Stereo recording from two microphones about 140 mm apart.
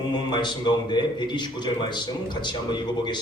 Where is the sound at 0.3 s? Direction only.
30° left (ahead or behind).